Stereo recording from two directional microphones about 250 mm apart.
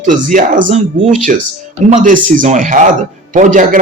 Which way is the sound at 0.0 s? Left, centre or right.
Right.